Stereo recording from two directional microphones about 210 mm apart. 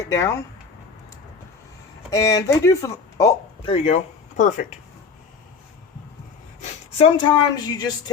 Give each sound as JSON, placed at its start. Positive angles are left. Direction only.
{"t": 0.1, "sound": "speech", "side_deg": 15}
{"t": 2.0, "sound": "speech", "side_deg": 15}
{"t": 3.7, "sound": "speech", "side_deg": 30}
{"t": 6.6, "sound": "speech", "side_deg": 25}